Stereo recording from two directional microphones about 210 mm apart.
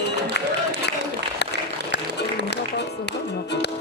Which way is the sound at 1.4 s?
55° left (ahead or behind).